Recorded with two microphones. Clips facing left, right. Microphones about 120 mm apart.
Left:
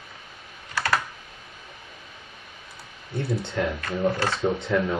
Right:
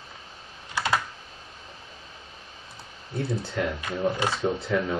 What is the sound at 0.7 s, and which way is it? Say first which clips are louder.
Computer keyboard: left 1 dB; 20° right (ahead or behind).